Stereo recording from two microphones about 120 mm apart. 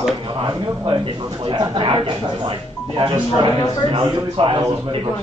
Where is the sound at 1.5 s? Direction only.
45° right (ahead or behind).